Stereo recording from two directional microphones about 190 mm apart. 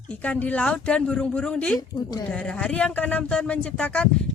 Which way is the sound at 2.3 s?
5° left (ahead or behind).